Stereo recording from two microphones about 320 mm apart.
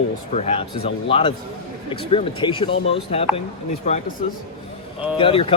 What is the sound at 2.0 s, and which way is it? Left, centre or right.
Speech, centre.